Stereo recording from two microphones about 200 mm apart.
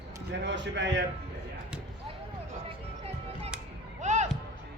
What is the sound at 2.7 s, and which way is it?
Music, 30° right (ahead or behind).